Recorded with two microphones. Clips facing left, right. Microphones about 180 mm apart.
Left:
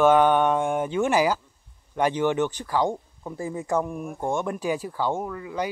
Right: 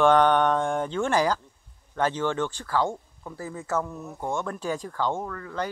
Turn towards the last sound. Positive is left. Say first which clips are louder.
# left 2 dB
turn(degrees=15)  # may be behind; listen again after turning